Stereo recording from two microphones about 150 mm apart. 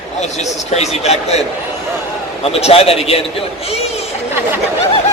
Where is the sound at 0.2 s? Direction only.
50° left (ahead or behind).